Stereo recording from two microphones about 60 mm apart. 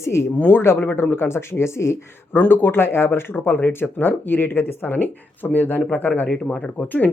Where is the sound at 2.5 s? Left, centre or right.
Left.